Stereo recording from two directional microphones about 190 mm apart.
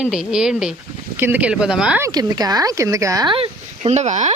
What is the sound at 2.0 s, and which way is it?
Speech, 20° right (ahead or behind).